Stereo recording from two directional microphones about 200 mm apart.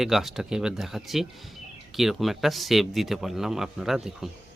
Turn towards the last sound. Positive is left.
turn(degrees=0)  # may be behind; listen again after turning